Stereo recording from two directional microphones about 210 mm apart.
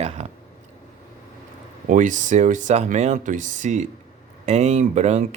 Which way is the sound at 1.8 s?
35° right (ahead or behind).